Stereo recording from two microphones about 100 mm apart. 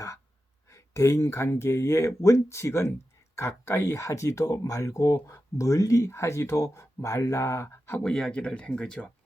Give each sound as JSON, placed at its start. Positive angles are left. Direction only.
{"t": 0.7, "sound": "speech", "side_deg": 30}
{"t": 8.0, "sound": "speech", "side_deg": 5}